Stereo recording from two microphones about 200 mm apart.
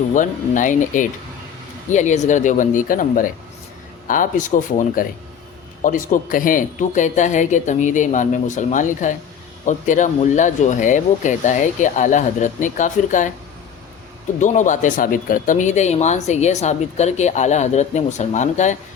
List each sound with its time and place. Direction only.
0.1 s speech: 40° left (ahead or behind)
14.3 s speech: 40° left (ahead or behind)